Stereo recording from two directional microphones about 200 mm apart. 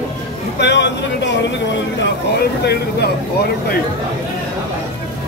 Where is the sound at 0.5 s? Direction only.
60° left (ahead or behind).